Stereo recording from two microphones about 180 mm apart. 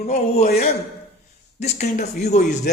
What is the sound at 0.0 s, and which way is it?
Speech, 50° left (ahead or behind).